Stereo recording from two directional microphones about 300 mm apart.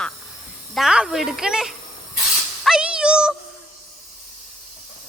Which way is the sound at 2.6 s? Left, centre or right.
Centre.